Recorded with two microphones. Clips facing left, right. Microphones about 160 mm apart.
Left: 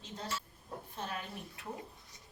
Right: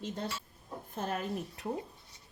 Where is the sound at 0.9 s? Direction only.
45° right (ahead or behind).